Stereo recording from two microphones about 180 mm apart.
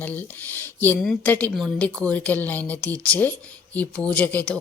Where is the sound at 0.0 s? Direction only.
10° left (ahead or behind).